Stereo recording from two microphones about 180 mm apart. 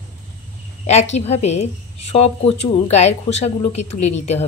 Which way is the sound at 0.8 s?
40° left (ahead or behind).